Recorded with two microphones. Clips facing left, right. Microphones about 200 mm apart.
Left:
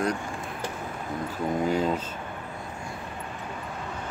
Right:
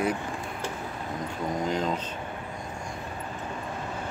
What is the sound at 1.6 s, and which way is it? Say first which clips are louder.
Speech: left 3 dB; 10° left (ahead or behind).